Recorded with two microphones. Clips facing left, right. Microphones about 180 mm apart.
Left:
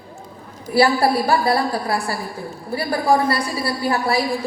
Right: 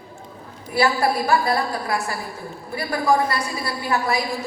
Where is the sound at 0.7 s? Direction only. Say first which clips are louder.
Left 4 dB; 30° left (ahead or behind).